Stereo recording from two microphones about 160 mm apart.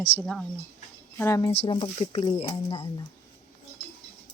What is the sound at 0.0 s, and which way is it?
Speech, 15° left (ahead or behind).